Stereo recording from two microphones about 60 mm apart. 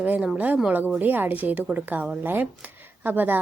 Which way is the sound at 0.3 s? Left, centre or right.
Right.